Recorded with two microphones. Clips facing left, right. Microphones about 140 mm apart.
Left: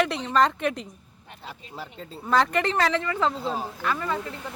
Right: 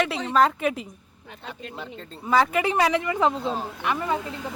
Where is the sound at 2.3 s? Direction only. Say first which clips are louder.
Right 1 dB; 5° right (ahead or behind).